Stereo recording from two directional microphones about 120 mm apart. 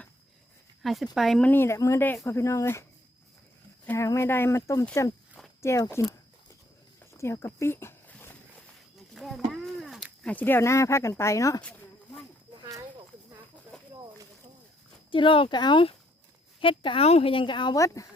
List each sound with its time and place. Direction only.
0.8 s speech: centre (ahead or behind)
1.5 s speech: 20° left (ahead or behind)
3.8 s speech: 25° left (ahead or behind)
7.0 s walk: 20° left (ahead or behind)
9.1 s a sound: centre (ahead or behind)
10.2 s speech: 15° left (ahead or behind)
11.6 s a sound: 10° left (ahead or behind)
13.7 s a sound: 5° left (ahead or behind)
15.1 s a woman's voice: 45° left (ahead or behind)
17.7 s speech: 25° left (ahead or behind)